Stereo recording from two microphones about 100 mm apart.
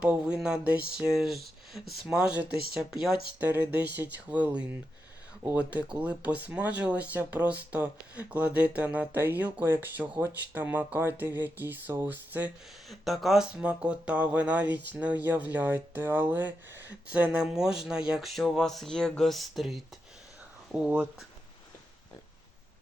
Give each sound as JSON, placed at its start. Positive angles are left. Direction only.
{"t": 0.0, "sound": "speech", "side_deg": -10}
{"t": 3.4, "sound": "speech", "side_deg": -20}
{"t": 12.9, "sound": "speech", "side_deg": 0}
{"t": 20.7, "sound": "speech", "side_deg": -15}